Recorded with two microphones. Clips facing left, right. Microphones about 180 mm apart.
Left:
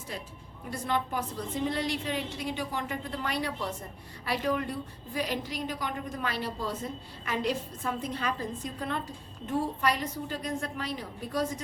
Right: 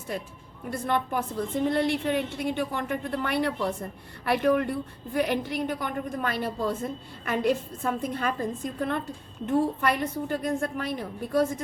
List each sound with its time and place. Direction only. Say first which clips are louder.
0.1 s a woman's voice: right 7 dB; 50° right (ahead or behind)